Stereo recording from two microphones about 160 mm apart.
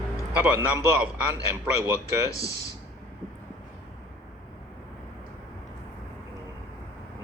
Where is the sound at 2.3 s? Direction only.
20° left (ahead or behind).